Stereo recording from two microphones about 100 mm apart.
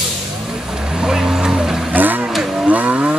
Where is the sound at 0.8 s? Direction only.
5° right (ahead or behind).